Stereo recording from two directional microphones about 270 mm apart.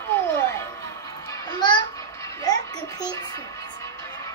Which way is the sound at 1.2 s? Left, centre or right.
Centre.